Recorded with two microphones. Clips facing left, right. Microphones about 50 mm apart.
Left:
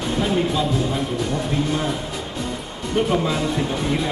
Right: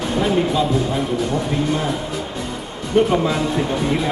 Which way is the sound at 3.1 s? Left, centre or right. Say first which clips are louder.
Right 2 dB; centre.